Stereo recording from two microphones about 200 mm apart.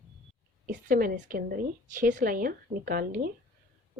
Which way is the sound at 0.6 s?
45° right (ahead or behind).